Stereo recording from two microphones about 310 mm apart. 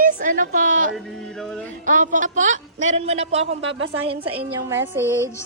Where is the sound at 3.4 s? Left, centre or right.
Right.